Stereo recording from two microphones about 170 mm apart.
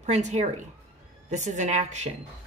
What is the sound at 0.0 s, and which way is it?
Speech, 40° right (ahead or behind).